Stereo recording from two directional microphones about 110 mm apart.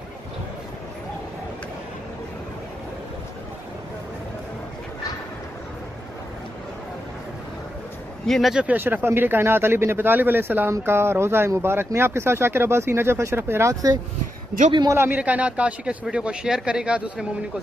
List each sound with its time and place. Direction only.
8.3 s speech: centre (ahead or behind)
8.6 s speech: 15° right (ahead or behind)
14.9 s a man's voice: 20° right (ahead or behind)